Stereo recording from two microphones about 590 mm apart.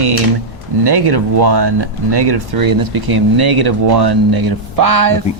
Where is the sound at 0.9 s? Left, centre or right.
Right.